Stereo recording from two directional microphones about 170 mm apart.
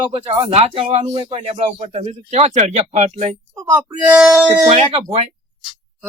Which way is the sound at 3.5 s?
15° right (ahead or behind).